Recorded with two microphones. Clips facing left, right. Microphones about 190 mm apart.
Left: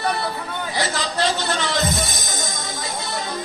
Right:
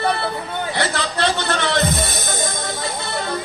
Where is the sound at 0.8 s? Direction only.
60° right (ahead or behind).